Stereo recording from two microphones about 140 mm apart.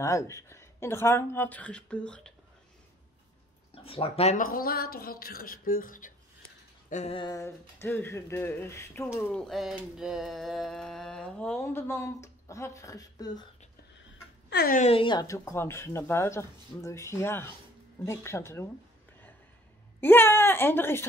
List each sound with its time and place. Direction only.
0.0 s speech: 20° left (ahead or behind)
3.7 s speech: 40° left (ahead or behind)
4.4 s speech: 90° left; by 6.1 s 70° left (ahead or behind)
6.9 s a sound: 55° left (ahead or behind)
7.3 s speech: 15° left (ahead or behind)
14.6 s speech: 90° left
14.9 s speech: 35° left (ahead or behind)
15.2 s speech: 20° left (ahead or behind)
20.0 s speech: 15° left (ahead or behind)